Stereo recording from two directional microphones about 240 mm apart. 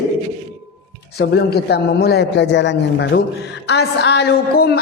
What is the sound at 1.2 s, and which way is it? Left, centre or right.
A man's voice, left.